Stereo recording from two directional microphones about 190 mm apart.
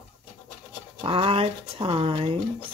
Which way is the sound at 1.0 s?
30° right (ahead or behind).